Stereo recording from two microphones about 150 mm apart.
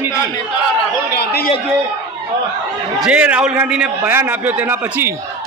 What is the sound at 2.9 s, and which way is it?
A man's voice, 5° right (ahead or behind).